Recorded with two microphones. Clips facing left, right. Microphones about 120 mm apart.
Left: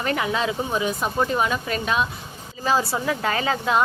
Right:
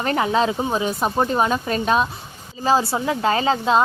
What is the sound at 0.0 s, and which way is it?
A woman's voice, 35° right (ahead or behind).